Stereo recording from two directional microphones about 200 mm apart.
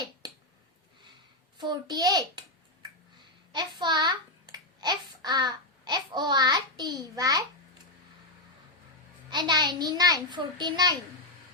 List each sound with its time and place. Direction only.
0.2 s finger snapping: 20° right (ahead or behind)
1.5 s a child's voice: 20° right (ahead or behind)
3.5 s a sound: 20° right (ahead or behind)
9.3 s a child's voice: 20° right (ahead or behind)